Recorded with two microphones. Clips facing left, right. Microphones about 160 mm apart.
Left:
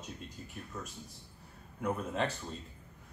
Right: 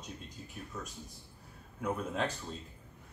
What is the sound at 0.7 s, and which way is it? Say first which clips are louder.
Speech: even; centre (ahead or behind).